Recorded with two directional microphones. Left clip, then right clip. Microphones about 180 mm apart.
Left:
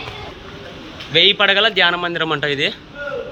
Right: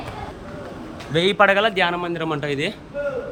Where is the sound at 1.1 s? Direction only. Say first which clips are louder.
Left 7 dB; 40° right (ahead or behind).